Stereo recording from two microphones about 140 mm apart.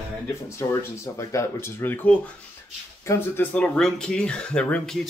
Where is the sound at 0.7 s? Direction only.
20° left (ahead or behind).